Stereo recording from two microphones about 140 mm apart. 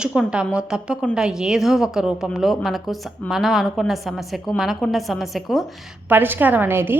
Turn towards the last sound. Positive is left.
turn(degrees=-15)  # may be behind; listen again after turning